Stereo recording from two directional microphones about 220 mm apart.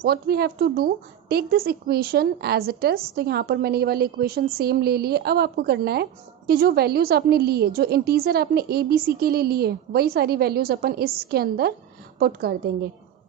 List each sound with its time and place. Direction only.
0.0 s a woman's voice: 45° right (ahead or behind)